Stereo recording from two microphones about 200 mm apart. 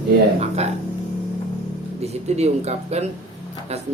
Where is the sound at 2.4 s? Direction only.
35° right (ahead or behind).